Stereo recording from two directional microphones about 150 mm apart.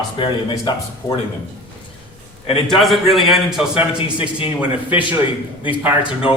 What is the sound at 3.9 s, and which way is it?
Speech, 35° left (ahead or behind).